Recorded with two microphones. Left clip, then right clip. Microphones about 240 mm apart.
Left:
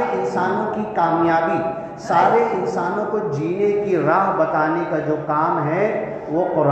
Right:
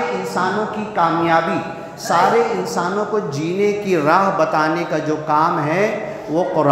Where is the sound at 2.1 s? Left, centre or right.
Right.